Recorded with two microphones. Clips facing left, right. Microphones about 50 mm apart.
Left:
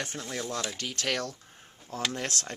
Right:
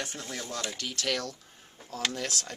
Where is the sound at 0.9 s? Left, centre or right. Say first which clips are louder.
Left 1 dB; left.